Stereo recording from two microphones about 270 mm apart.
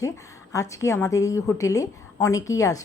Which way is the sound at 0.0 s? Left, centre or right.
Centre.